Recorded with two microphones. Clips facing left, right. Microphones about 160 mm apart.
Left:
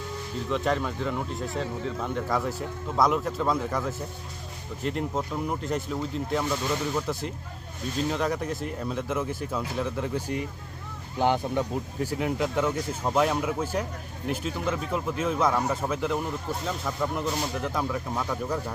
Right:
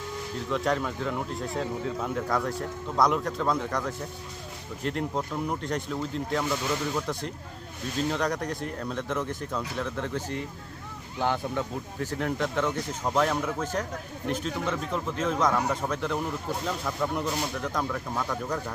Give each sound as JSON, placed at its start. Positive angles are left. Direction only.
{"t": 0.3, "sound": "speech", "side_deg": 0}